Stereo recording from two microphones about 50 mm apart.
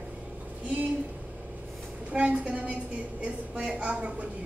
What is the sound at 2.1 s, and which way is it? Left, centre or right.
A woman's voice, right.